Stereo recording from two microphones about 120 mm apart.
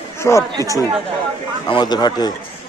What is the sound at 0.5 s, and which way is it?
Speech, 30° right (ahead or behind).